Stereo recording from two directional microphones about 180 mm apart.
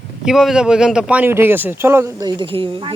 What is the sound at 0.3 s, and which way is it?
Speech, centre (ahead or behind).